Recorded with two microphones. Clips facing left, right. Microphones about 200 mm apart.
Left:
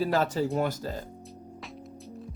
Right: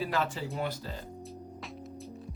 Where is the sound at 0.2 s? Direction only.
40° left (ahead or behind).